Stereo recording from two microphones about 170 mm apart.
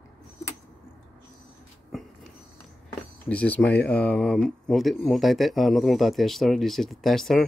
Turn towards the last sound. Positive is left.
turn(degrees=0)  # may be behind; listen again after turning